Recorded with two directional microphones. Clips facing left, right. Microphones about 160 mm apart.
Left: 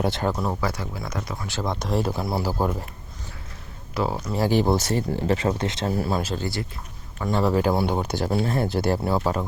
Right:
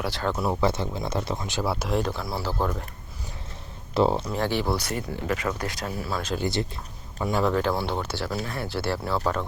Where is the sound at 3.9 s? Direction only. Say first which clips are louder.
Right 4 dB; 25° right (ahead or behind).